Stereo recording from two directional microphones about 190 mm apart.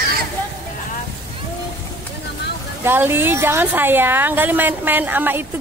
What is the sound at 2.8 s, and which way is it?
A woman's voice, 10° right (ahead or behind).